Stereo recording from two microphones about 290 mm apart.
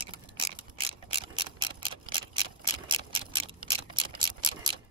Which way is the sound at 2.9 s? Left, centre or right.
Centre.